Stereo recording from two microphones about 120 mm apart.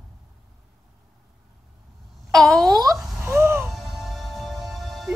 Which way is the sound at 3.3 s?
20° right (ahead or behind).